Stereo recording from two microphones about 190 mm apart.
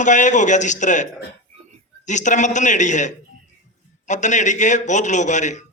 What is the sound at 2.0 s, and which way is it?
Speech, 40° left (ahead or behind).